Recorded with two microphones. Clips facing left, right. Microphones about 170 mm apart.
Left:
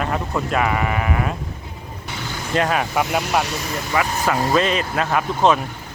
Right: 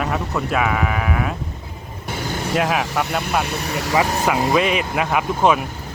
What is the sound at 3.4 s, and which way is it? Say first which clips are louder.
Speech: right 2 dB; 65° right (ahead or behind).